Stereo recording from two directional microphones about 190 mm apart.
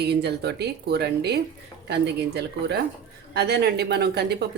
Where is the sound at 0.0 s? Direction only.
60° right (ahead or behind).